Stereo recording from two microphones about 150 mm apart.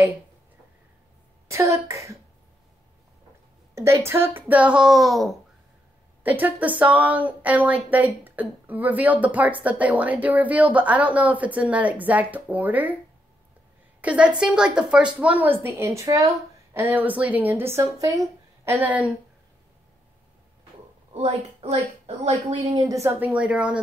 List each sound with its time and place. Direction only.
1.5 s speech: 20° right (ahead or behind)
3.7 s speech: 20° right (ahead or behind); by 5.3 s centre (ahead or behind)
6.2 s speech: 10° right (ahead or behind)
14.0 s speech: 5° right (ahead or behind)
21.1 s a woman's voice: 45° right (ahead or behind)
22.7 s speech: 25° right (ahead or behind); by 23.8 s 10° right (ahead or behind)